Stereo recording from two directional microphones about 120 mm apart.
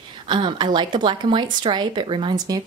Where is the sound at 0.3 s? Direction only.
40° right (ahead or behind).